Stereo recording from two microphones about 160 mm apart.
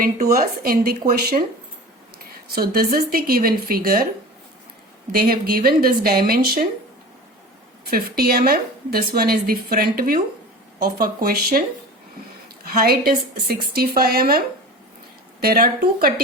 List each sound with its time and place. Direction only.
0.0 s speech: 70° right (ahead or behind)
5.1 s speech: 70° right (ahead or behind)
7.9 s speech: 70° right (ahead or behind)
12.7 s speech: 70° right (ahead or behind)